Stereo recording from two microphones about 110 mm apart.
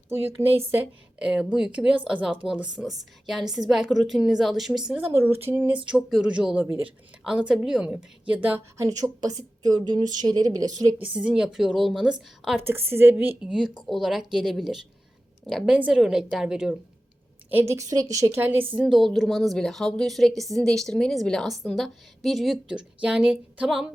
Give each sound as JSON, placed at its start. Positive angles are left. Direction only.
{"t": 0.1, "sound": "a woman's voice", "side_deg": -20}
{"t": 1.3, "sound": "a woman's voice", "side_deg": -5}
{"t": 5.5, "sound": "a woman's voice", "side_deg": -15}
{"t": 8.8, "sound": "a woman's voice", "side_deg": -30}
{"t": 11.1, "sound": "a woman's voice", "side_deg": -10}
{"t": 12.6, "sound": "a woman's voice", "side_deg": -20}
{"t": 13.9, "sound": "a woman's voice", "side_deg": -5}
{"t": 17.5, "sound": "a woman's voice", "side_deg": -20}
{"t": 18.8, "sound": "a woman's voice", "side_deg": 0}